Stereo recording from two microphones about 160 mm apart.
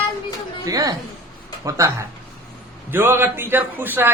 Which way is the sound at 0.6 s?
20° right (ahead or behind).